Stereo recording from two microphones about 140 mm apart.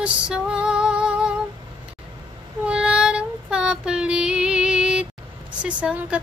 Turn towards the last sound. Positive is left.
turn(degrees=-10)  # may be behind; listen again after turning